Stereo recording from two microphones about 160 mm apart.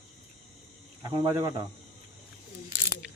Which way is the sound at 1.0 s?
30° right (ahead or behind).